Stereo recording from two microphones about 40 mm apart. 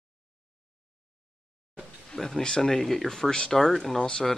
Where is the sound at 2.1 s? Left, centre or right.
Centre.